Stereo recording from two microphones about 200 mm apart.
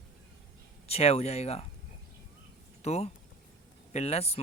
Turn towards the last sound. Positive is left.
turn(degrees=30)  # may be behind; listen again after turning